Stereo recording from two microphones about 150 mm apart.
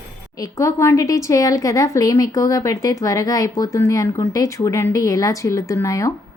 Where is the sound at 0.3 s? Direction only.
20° left (ahead or behind).